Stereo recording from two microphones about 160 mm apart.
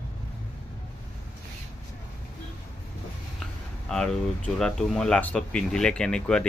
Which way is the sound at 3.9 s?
5° left (ahead or behind).